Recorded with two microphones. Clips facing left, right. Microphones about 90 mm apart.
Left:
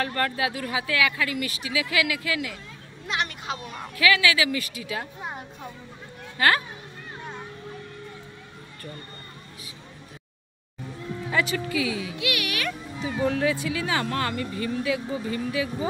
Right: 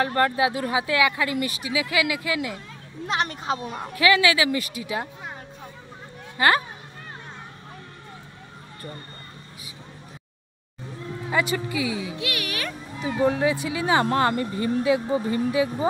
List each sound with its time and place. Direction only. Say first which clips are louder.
0.0 s speech: right 5 dB; 25° right (ahead or behind)
3.1 s a woman's voice: right 4 dB; 35° right (ahead or behind)
6.3 s speech: right 2 dB; 20° right (ahead or behind)
11.2 s speech: right 2 dB; 20° right (ahead or behind)
13.0 s speech: right 3 dB; 20° right (ahead or behind)